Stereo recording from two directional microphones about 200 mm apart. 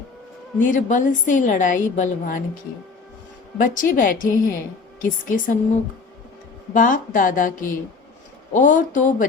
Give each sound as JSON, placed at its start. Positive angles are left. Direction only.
{"t": 0.6, "sound": "a woman's voice", "side_deg": 40}
{"t": 3.6, "sound": "a woman's voice", "side_deg": 40}
{"t": 6.7, "sound": "a woman's voice", "side_deg": 40}